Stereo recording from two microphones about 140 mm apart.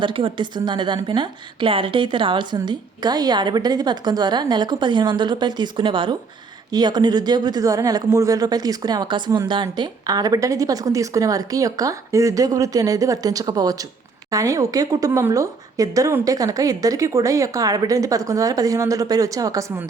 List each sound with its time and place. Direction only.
0.0 s a woman's voice: 35° right (ahead or behind)